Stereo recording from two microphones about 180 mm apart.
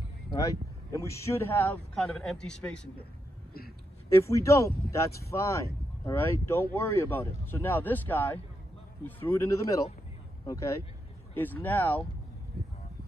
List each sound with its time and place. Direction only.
0.4 s a man's voice: 20° left (ahead or behind)
4.1 s speech: 15° left (ahead or behind)